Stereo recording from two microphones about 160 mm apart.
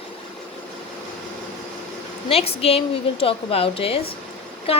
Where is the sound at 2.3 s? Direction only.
35° left (ahead or behind).